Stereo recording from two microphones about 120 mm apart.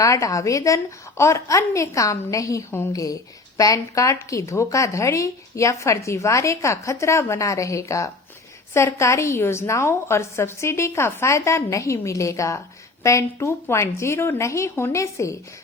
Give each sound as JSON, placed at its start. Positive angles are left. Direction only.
{"t": 0.0, "sound": "a woman's voice", "side_deg": 25}